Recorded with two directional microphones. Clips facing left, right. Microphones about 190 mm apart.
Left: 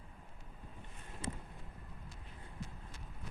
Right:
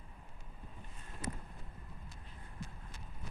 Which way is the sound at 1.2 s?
25° left (ahead or behind).